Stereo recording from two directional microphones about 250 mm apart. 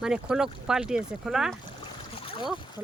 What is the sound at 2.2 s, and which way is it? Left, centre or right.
Boat, left.